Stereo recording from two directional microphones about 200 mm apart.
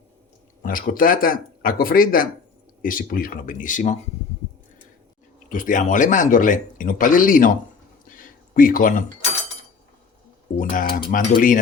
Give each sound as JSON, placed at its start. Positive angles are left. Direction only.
{"t": 0.6, "sound": "speech", "side_deg": 45}
{"t": 5.5, "sound": "speech", "side_deg": 40}
{"t": 8.0, "sound": "a sound", "side_deg": 45}
{"t": 10.6, "sound": "speech", "side_deg": 40}